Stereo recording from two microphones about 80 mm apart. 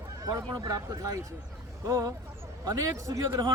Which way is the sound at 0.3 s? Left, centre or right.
Right.